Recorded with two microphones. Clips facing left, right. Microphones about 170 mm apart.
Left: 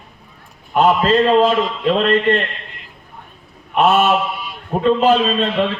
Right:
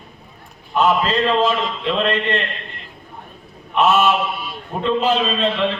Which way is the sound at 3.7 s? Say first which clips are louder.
Left 2 dB; 50° left (ahead or behind).